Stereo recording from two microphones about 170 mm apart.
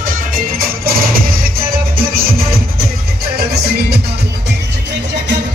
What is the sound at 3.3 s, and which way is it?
Music, 70° right (ahead or behind).